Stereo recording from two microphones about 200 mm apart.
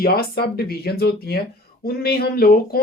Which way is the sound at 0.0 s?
50° left (ahead or behind).